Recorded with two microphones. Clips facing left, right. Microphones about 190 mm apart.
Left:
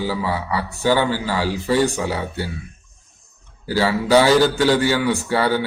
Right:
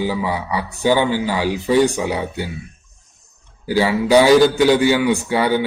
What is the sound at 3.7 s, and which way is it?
A man's voice, 15° right (ahead or behind).